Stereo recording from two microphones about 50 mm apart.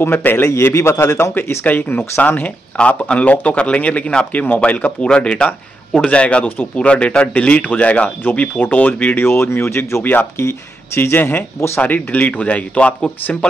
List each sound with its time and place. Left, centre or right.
0.0 s speech: left
0.7 s a man's voice: left
1.7 s speech: left
8.2 s speech: left
9.1 s speech: left
10.4 s speech: left
11.0 s speech: left
11.8 s speech: left